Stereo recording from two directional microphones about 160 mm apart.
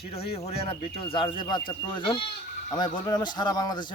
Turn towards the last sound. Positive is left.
turn(degrees=25)  # may be behind; listen again after turning